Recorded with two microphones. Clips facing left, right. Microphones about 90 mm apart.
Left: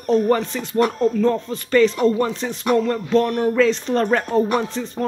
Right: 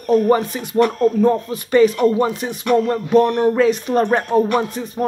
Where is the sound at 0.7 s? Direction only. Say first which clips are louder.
Right 3 dB; 20° left (ahead or behind).